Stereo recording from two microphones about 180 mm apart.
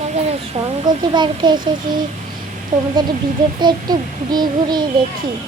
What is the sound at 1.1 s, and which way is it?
Speech, 25° right (ahead or behind).